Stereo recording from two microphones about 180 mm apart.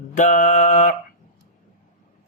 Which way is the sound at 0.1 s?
45° left (ahead or behind).